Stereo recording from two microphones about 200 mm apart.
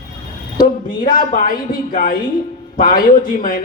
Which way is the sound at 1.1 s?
40° left (ahead or behind).